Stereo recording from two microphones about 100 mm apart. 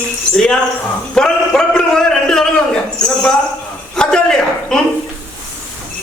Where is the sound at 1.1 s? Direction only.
5° left (ahead or behind).